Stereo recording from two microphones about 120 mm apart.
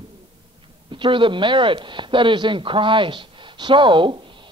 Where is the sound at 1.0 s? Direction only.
45° right (ahead or behind).